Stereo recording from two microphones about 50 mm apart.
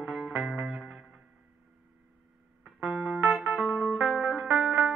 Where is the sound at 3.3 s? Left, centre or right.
Centre.